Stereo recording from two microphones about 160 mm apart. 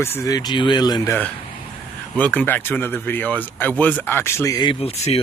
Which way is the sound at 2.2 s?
10° left (ahead or behind).